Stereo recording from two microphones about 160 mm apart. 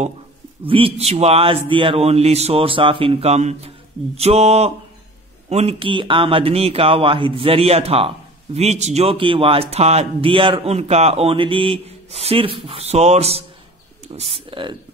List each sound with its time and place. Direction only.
0.7 s speech: 35° right (ahead or behind)